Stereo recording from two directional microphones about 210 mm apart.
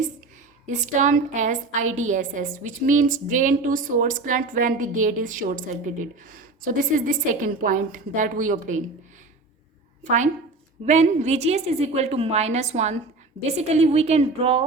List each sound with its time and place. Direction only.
0.7 s a woman's voice: 35° right (ahead or behind)
10.0 s a woman's voice: 35° right (ahead or behind)